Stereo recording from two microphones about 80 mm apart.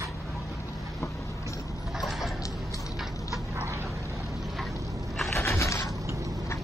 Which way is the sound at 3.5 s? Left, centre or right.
Right.